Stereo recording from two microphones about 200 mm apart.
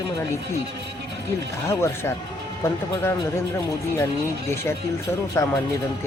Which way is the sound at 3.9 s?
15° left (ahead or behind).